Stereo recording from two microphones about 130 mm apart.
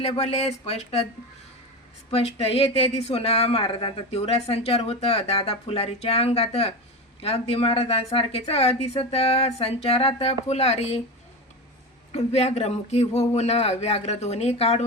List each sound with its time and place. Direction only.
0.0 s speech: 55° left (ahead or behind)
2.0 s speech: 50° left (ahead or behind)
12.1 s speech: 55° left (ahead or behind)